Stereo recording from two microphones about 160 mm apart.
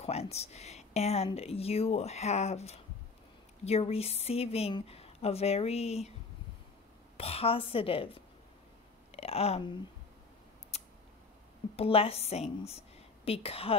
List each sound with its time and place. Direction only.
0.0 s speech: 40° left (ahead or behind)
7.2 s speech: 40° left (ahead or behind)
10.7 s scissors: 40° left (ahead or behind)
11.7 s a woman's voice: 35° left (ahead or behind)